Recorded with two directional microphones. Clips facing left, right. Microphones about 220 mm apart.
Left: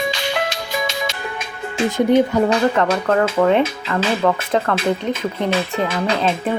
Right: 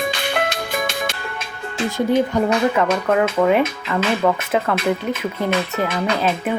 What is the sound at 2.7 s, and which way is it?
Speech, 5° right (ahead or behind).